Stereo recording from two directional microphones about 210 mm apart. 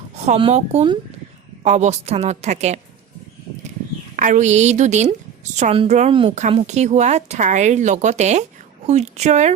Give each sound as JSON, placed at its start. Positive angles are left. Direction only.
{"t": 0.2, "sound": "a woman's voice", "side_deg": -30}
{"t": 4.2, "sound": "a woman's voice", "side_deg": -35}